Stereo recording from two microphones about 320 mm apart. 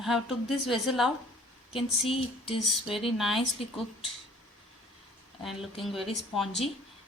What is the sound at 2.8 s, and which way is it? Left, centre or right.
Speech, centre.